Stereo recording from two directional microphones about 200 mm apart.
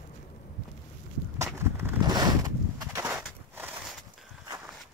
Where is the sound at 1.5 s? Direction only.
10° right (ahead or behind).